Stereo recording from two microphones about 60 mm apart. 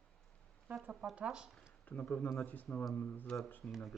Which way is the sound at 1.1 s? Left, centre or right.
Centre.